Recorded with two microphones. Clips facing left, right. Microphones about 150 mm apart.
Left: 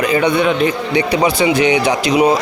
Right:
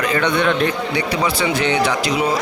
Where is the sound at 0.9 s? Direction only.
20° left (ahead or behind).